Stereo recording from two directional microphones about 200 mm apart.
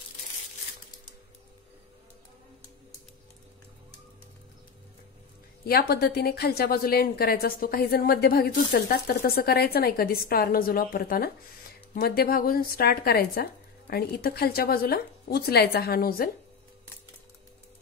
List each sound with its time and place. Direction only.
5.7 s a woman's voice: 50° left (ahead or behind)